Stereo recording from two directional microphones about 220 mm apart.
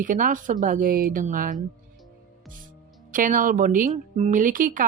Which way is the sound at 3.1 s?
35° right (ahead or behind).